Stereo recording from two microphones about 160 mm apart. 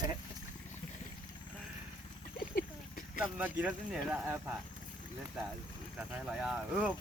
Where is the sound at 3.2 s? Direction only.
10° right (ahead or behind).